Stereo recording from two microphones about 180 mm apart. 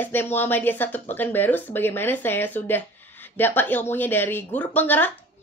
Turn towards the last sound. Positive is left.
turn(degrees=10)  # may be behind; listen again after turning